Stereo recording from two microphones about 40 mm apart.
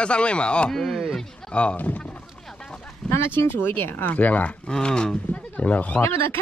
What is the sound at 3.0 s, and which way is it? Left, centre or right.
Speech, left.